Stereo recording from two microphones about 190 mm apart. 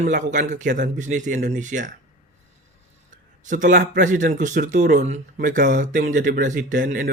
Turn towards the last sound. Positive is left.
turn(degrees=-45)  # may be behind; listen again after turning